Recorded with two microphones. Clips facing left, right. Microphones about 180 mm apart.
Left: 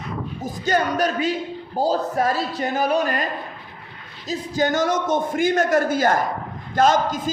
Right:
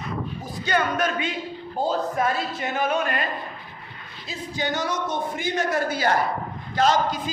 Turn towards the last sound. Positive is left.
turn(degrees=45)  # may be behind; listen again after turning